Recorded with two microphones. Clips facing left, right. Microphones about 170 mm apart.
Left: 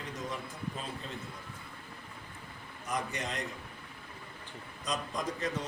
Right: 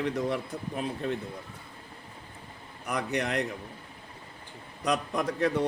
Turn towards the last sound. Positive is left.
turn(degrees=-65)  # may be behind; listen again after turning